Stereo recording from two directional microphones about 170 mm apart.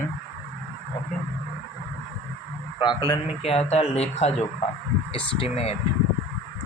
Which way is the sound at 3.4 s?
35° left (ahead or behind).